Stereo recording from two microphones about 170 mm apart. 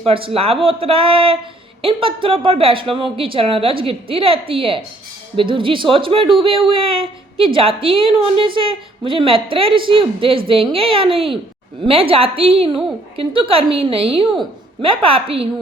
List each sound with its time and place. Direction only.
0.0 s speech: 35° right (ahead or behind)